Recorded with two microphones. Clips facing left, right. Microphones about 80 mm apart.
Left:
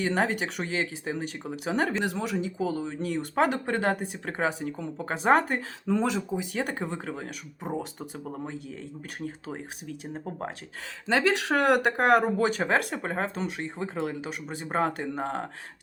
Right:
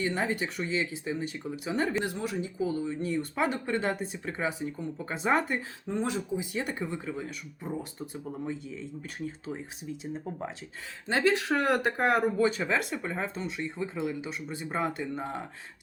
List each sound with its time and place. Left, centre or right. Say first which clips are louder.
0.0 s speech: left 3 dB; left
1.6 s speech: left 3 dB; left
2.1 s speech: left 3 dB; left
3.4 s speech: left 4 dB; left
6.5 s speech: left 2 dB; left
8.2 s speech: right 1 dB; left
11.1 s speech: left 2 dB; left